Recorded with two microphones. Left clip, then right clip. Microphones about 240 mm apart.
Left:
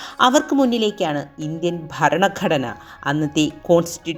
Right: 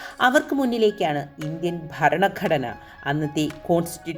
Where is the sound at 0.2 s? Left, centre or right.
Centre.